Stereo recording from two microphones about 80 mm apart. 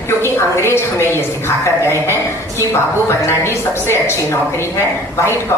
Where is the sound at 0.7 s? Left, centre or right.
Left.